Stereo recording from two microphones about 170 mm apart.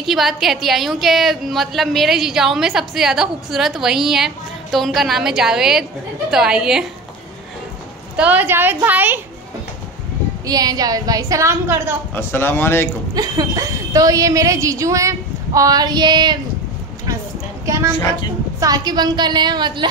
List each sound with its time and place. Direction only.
0.0 s a woman's voice: centre (ahead or behind)
8.2 s a woman's voice: 10° right (ahead or behind)
10.4 s a woman's voice: 20° right (ahead or behind)
12.1 s speech: 15° left (ahead or behind)
13.1 s a woman's voice: 20° right (ahead or behind)
17.6 s a sound: 20° right (ahead or behind)
17.9 s a woman's voice: 25° left (ahead or behind)
18.6 s a woman's voice: 20° right (ahead or behind)